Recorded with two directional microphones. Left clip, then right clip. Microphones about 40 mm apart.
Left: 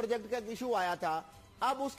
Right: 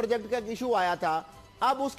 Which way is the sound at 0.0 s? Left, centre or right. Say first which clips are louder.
Right 6 dB; left.